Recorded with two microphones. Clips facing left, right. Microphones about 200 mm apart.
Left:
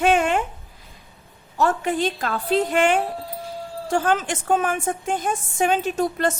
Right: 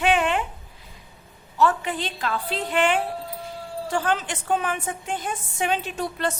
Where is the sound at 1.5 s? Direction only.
45° left (ahead or behind).